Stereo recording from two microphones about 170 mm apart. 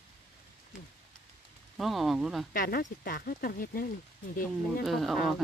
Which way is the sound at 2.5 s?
60° left (ahead or behind).